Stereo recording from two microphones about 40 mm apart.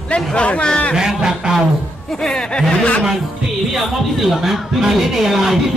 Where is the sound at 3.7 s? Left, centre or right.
Centre.